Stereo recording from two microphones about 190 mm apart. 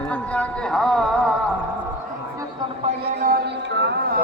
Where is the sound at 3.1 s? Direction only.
55° right (ahead or behind).